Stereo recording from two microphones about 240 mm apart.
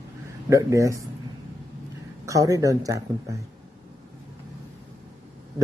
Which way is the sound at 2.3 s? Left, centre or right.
Centre.